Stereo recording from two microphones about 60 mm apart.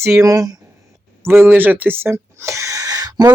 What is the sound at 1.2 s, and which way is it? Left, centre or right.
Speech, right.